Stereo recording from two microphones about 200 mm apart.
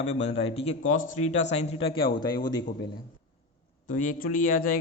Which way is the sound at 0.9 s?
40° left (ahead or behind).